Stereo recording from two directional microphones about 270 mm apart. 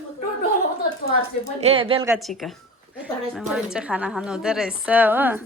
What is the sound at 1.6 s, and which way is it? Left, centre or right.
Speech, right.